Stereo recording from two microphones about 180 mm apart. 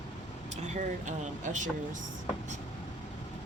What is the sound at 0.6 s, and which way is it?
Vehicle, 40° right (ahead or behind).